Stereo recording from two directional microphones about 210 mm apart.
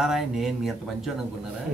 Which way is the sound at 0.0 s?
Centre (ahead or behind).